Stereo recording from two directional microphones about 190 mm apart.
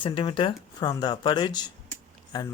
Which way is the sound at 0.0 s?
25° left (ahead or behind).